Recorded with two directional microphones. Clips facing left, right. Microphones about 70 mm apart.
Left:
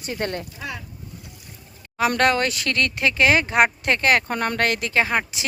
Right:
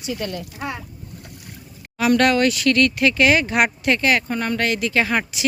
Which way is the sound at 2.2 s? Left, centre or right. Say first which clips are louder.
Right 3 dB; left.